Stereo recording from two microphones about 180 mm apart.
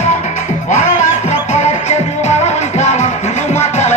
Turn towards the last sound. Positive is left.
turn(degrees=40)  # may be behind; listen again after turning